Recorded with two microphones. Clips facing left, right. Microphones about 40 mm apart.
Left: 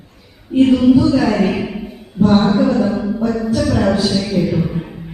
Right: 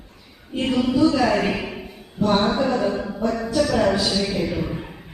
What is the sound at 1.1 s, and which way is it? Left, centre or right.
Speech, centre.